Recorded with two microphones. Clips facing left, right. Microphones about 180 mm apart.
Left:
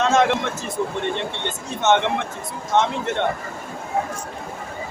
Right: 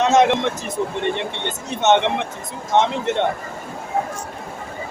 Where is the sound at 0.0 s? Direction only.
20° right (ahead or behind).